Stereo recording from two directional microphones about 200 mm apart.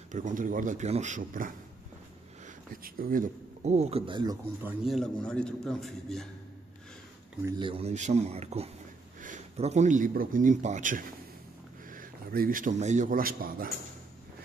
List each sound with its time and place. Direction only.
0.1 s a man's voice: 40° right (ahead or behind); by 4.4 s 20° right (ahead or behind)
4.6 s a man's voice: centre (ahead or behind)
7.4 s speech: 25° right (ahead or behind); by 13.7 s 45° right (ahead or behind)